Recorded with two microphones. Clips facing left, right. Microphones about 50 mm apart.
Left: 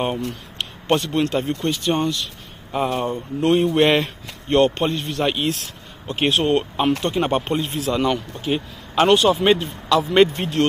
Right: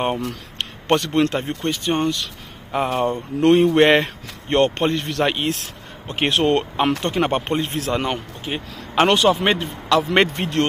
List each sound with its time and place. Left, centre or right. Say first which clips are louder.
0.0 s speech: right 1 dB; right
0.6 s a sound: right 1 dB; right
1.0 s speech: right 1 dB; right
1.7 s speech: right 2 dB; right
6.0 s speech: right 1 dB; right
7.0 s speech: even; right
8.5 s speech: left 5 dB; centre
8.9 s speech: even; right
9.4 s speech: left 3 dB; right